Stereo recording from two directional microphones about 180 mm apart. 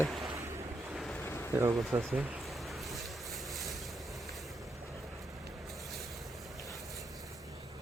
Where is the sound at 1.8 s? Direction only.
Centre (ahead or behind).